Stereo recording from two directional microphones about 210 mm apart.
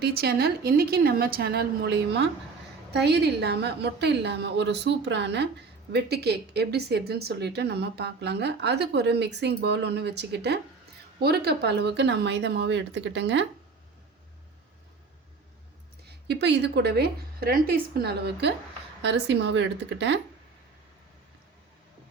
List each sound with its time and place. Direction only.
0.0 s a woman's voice: 50° right (ahead or behind)
16.0 s a woman's voice: 55° right (ahead or behind)